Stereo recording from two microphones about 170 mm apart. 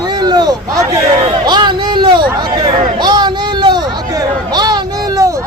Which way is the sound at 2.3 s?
25° right (ahead or behind).